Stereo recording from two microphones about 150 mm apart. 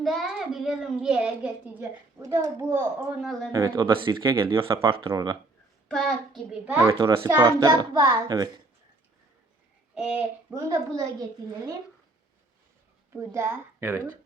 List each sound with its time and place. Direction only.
0.0 s a child's voice: centre (ahead or behind)
2.2 s a child's voice: 20° right (ahead or behind)
3.8 s speech: 35° right (ahead or behind)
5.9 s a child's voice: 5° left (ahead or behind)
6.7 s a child's voice: 15° right (ahead or behind)
9.9 s a child's voice: 5° right (ahead or behind)
10.5 s a child's voice: 20° right (ahead or behind)
13.1 s speech: 15° right (ahead or behind)